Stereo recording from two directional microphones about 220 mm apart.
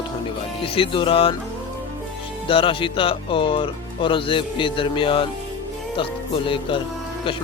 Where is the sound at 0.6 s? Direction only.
25° left (ahead or behind).